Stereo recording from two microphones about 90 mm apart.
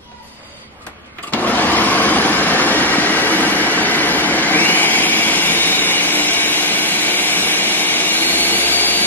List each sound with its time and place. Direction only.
1.6 s train: 20° left (ahead or behind)